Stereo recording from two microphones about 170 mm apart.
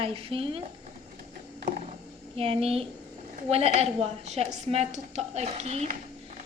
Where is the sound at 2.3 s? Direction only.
35° right (ahead or behind).